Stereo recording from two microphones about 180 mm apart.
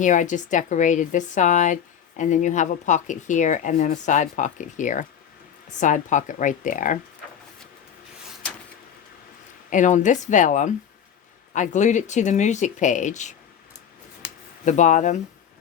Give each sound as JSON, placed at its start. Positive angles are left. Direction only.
{"t": 0.0, "sound": "speech", "side_deg": 45}
{"t": 9.6, "sound": "speech", "side_deg": 45}
{"t": 14.6, "sound": "speech", "side_deg": 45}